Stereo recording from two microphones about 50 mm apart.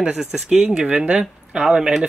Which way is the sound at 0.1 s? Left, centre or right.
Centre.